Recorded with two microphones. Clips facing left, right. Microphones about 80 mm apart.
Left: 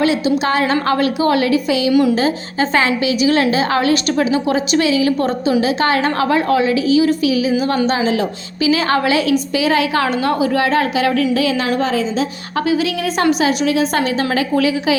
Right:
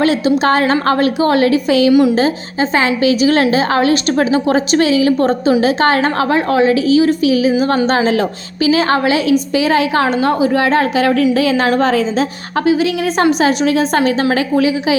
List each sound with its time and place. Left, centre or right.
0.0 s a woman's voice: right
1.9 s a woman's voice: centre
3.0 s a woman's voice: right
8.7 s a woman's voice: right
12.5 s a woman's voice: right